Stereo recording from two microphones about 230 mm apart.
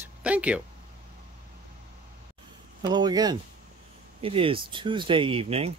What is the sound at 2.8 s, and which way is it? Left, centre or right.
Speech, centre.